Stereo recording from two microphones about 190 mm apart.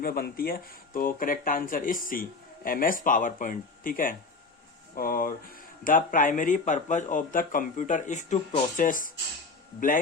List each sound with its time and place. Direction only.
0.0 s speech: 50° left (ahead or behind)